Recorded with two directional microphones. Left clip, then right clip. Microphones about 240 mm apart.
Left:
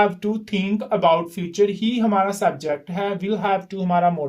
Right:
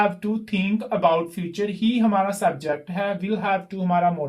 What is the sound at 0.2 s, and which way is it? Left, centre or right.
Speech, left.